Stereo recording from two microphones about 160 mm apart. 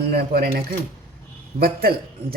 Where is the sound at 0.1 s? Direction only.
70° right (ahead or behind).